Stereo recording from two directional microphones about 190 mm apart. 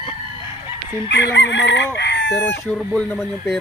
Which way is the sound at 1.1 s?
70° left (ahead or behind).